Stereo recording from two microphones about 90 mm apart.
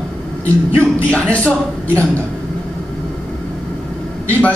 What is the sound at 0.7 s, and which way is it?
Speech, 15° left (ahead or behind).